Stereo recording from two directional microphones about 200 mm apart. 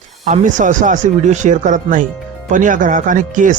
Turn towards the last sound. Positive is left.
turn(degrees=-40)  # may be behind; listen again after turning